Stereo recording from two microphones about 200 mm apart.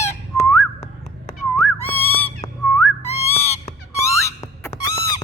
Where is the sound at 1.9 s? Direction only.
10° left (ahead or behind).